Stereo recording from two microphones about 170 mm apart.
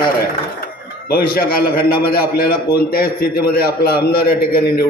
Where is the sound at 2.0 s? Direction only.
60° left (ahead or behind).